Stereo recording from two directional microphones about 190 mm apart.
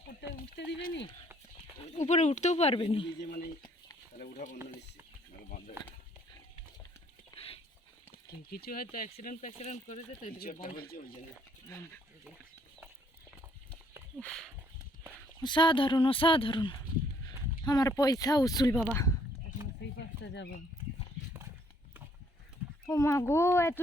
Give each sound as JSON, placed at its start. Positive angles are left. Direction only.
{"t": 0.3, "sound": "speech", "side_deg": 50}
{"t": 1.9, "sound": "speech", "side_deg": 35}
{"t": 3.2, "sound": "speech", "side_deg": 50}
{"t": 7.3, "sound": "a sound", "side_deg": 30}
{"t": 8.3, "sound": "speech", "side_deg": 55}
{"t": 14.2, "sound": "speech", "side_deg": 5}
{"t": 15.4, "sound": "speech", "side_deg": 25}
{"t": 19.8, "sound": "a sound", "side_deg": 65}
{"t": 20.2, "sound": "speech", "side_deg": 70}
{"t": 22.9, "sound": "a child's voice", "side_deg": 15}